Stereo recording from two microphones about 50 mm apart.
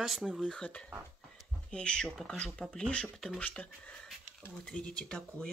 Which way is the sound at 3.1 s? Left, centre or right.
Centre.